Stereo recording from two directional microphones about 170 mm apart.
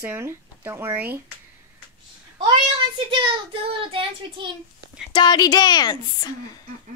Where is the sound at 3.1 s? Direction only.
30° right (ahead or behind).